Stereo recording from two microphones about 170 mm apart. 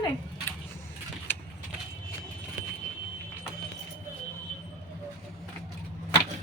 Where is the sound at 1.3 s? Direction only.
10° left (ahead or behind).